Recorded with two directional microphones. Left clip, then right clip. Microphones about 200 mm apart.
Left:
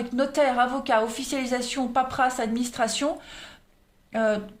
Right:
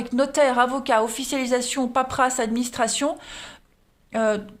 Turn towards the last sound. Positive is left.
turn(degrees=-35)  # may be behind; listen again after turning